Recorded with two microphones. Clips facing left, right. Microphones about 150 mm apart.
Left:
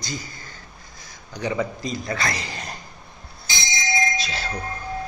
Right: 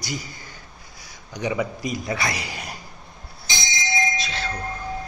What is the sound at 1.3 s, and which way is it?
Speech, 15° right (ahead or behind).